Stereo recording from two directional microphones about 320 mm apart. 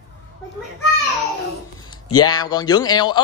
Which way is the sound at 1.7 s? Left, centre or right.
Centre.